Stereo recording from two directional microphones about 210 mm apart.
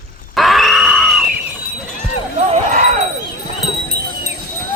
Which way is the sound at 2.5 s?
35° right (ahead or behind).